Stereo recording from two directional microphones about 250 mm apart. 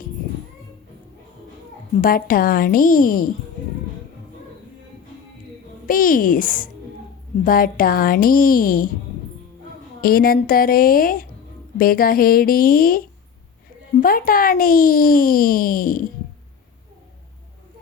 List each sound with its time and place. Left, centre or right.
2.0 s speech: left
5.9 s speech: left
10.0 s speech: left
14.0 s speech: left